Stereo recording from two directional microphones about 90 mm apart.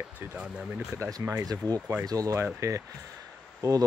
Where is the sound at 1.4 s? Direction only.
45° right (ahead or behind).